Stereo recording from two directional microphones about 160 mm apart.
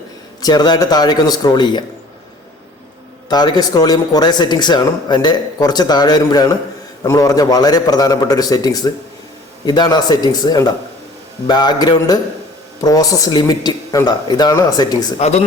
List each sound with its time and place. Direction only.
0.4 s speech: 25° left (ahead or behind)
3.2 s speech: 25° left (ahead or behind)
15.2 s speech: 40° left (ahead or behind)